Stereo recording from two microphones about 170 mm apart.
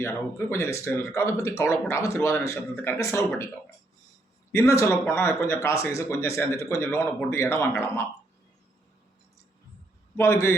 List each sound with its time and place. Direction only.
0.0 s speech: 15° left (ahead or behind)
4.5 s speech: 15° left (ahead or behind)
10.2 s speech: 15° left (ahead or behind)